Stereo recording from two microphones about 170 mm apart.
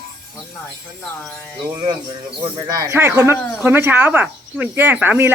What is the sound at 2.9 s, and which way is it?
Speech, 10° right (ahead or behind).